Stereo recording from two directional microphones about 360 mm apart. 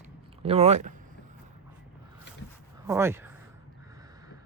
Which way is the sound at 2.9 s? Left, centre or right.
Centre.